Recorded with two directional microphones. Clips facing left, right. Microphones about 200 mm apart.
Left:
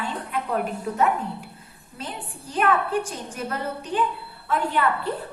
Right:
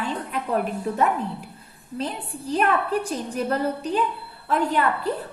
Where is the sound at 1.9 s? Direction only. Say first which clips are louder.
Right 6 dB; 35° right (ahead or behind).